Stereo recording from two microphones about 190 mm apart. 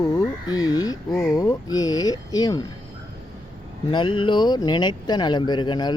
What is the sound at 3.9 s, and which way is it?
Speech, 25° left (ahead or behind).